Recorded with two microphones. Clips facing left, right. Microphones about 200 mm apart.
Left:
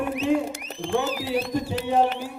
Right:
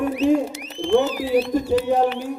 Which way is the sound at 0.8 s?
50° left (ahead or behind).